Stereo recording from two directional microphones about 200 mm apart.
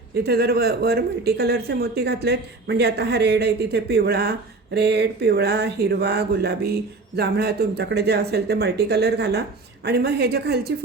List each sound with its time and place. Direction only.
0.2 s a woman's voice: 55° right (ahead or behind)